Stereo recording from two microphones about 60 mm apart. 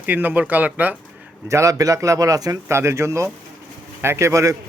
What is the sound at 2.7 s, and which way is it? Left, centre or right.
Speech, right.